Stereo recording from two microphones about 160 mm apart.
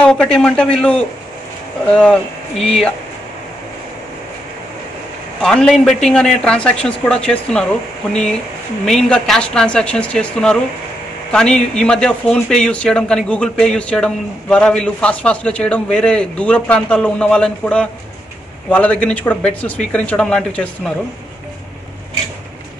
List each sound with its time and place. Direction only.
0.0 s a man's voice: 5° left (ahead or behind)
5.4 s a man's voice: 5° left (ahead or behind)
8.8 s a man's voice: 5° left (ahead or behind)